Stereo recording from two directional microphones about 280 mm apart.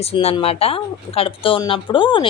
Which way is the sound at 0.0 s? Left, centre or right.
Left.